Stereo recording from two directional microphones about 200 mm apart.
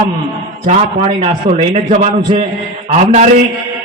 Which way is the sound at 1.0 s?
25° right (ahead or behind).